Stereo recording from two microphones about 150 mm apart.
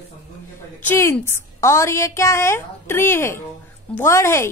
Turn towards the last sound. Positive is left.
turn(degrees=20)  # may be behind; listen again after turning